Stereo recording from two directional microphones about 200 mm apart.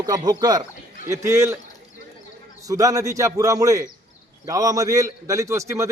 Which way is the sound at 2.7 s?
15° right (ahead or behind).